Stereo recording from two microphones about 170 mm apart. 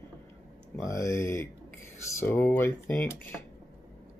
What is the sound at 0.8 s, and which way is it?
Speech, 15° left (ahead or behind).